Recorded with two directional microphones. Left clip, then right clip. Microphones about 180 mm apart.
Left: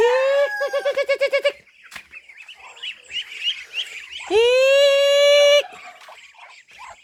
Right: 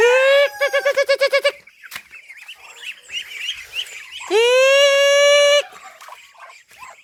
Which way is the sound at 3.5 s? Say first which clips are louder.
Left 5 dB; 65° right (ahead or behind).